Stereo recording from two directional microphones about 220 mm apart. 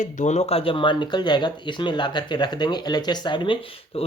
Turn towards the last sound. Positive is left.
turn(degrees=25)  # may be behind; listen again after turning